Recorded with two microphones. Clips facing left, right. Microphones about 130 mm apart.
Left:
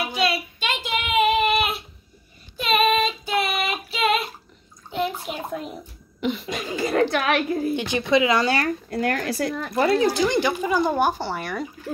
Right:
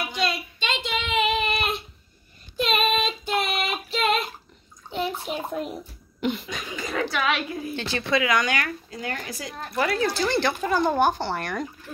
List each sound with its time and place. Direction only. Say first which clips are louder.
0.2 s child singing: left 3 dB; 5° left (ahead or behind)
4.8 s bathtub: left 2 dB; centre (ahead or behind)
6.2 s a sound: left 1 dB; centre (ahead or behind)
6.6 s speech: left 9 dB; 45° left (ahead or behind)
7.7 s speech: left 3 dB; 15° left (ahead or behind); by 8.7 s 35° left (ahead or behind)
8.9 s speech: left 9 dB; 70° left (ahead or behind)
9.8 s speech: left 5 dB; 30° left (ahead or behind)
10.1 s speech: left 3 dB; 15° left (ahead or behind)